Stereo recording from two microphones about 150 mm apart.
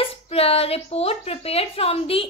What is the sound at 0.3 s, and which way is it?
A woman's voice, 40° left (ahead or behind).